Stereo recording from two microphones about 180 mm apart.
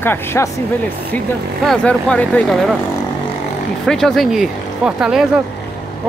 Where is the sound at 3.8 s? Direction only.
Centre (ahead or behind).